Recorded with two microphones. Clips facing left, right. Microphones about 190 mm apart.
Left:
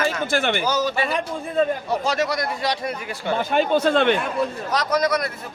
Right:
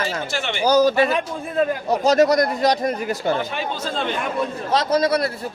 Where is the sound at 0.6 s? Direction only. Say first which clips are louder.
Right 7 dB; 40° right (ahead or behind).